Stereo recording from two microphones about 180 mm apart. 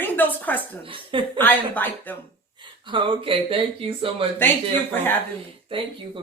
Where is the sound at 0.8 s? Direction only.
30° right (ahead or behind).